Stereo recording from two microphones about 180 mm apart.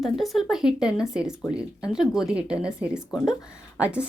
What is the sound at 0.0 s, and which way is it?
Speech, centre (ahead or behind).